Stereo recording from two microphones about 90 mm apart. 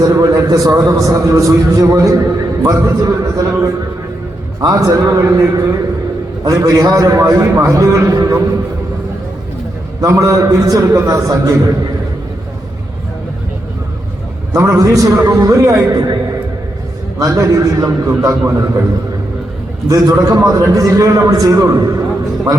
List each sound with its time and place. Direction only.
0.0 s a man's voice: 40° right (ahead or behind)
10.0 s a man's voice: 35° right (ahead or behind)
14.5 s a man's voice: 35° right (ahead or behind)
17.2 s a man's voice: 35° right (ahead or behind)
19.9 s a man's voice: 40° right (ahead or behind)